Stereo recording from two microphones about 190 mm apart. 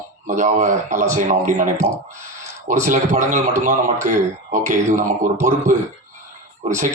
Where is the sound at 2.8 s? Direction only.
40° right (ahead or behind).